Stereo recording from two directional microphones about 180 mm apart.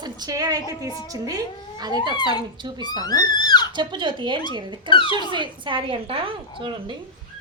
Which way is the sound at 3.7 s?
25° right (ahead or behind).